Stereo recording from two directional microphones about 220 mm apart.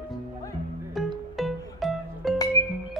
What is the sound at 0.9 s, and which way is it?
Music, centre (ahead or behind).